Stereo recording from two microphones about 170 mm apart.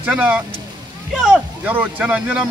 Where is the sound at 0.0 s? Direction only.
10° right (ahead or behind).